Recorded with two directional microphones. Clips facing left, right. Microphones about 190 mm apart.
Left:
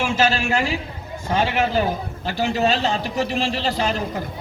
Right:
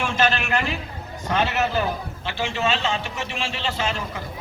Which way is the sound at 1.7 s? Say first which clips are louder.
Left 3 dB; 40° left (ahead or behind).